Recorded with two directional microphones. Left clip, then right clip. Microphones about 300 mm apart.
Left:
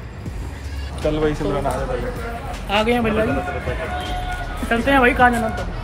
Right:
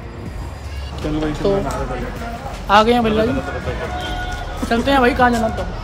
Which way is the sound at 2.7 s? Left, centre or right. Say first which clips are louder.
Right 6 dB; centre.